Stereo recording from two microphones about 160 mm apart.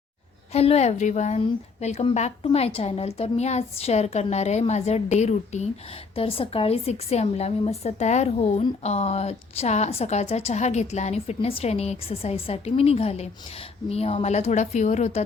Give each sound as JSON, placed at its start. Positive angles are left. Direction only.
{"t": 0.5, "sound": "a woman's voice", "side_deg": 40}